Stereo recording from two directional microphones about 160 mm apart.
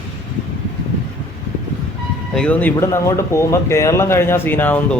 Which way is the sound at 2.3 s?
10° left (ahead or behind).